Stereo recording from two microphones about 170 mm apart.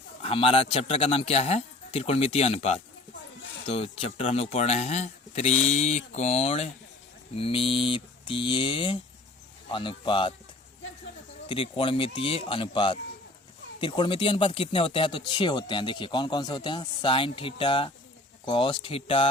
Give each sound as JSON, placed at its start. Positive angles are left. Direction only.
{"t": 0.2, "sound": "speech", "side_deg": 35}
{"t": 11.4, "sound": "speech", "side_deg": 30}